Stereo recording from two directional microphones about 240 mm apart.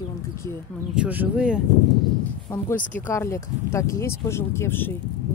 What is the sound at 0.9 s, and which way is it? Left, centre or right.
Speech, centre.